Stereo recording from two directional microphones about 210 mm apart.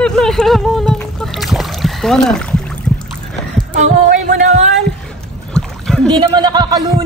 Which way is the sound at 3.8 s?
40° right (ahead or behind).